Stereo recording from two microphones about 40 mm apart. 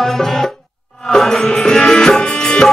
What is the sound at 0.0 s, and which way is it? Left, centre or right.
Music, centre.